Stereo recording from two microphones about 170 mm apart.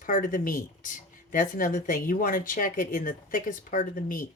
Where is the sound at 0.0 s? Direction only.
55° left (ahead or behind).